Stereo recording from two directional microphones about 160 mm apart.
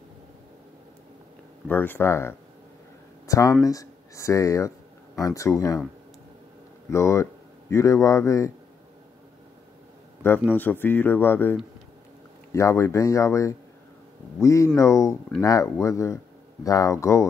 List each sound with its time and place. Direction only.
1.7 s speech: 10° left (ahead or behind)
6.9 s speech: 20° left (ahead or behind)
10.5 s speech: 10° left (ahead or behind)
12.5 s speech: 20° left (ahead or behind)